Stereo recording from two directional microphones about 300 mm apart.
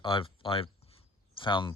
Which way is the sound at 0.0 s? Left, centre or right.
Centre.